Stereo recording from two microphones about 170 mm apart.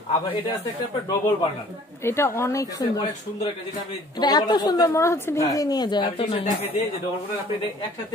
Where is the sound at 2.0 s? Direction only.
15° left (ahead or behind).